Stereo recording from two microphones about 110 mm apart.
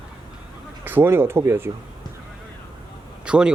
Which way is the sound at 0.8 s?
20° right (ahead or behind).